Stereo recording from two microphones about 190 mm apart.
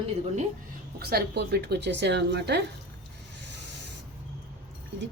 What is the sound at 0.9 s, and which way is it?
A woman's voice, 55° right (ahead or behind).